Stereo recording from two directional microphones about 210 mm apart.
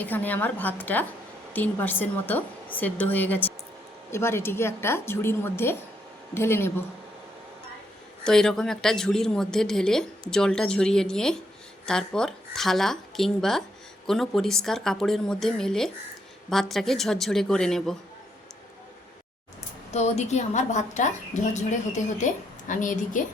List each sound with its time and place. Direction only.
0.0 s a woman's voice: 10° left (ahead or behind)
8.2 s a woman's voice: 5° left (ahead or behind)
19.9 s a woman's voice: 30° left (ahead or behind)